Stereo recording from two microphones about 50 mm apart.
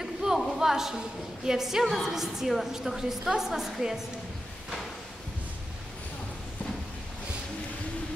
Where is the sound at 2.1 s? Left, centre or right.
Centre.